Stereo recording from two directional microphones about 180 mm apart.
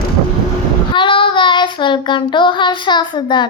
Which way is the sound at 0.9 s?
25° left (ahead or behind).